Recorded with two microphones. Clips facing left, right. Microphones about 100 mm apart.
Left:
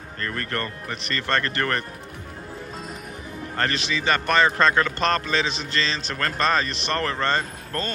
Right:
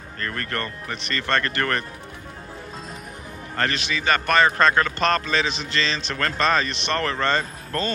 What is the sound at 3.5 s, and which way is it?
A man's voice, 35° left (ahead or behind).